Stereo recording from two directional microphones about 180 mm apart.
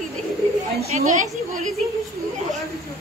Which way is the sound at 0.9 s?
45° right (ahead or behind).